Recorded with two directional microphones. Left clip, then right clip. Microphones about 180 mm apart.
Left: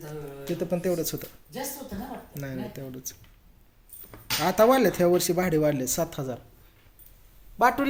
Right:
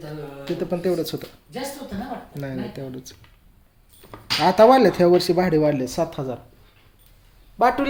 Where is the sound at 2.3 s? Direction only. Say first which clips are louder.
Right 3 dB; 10° right (ahead or behind).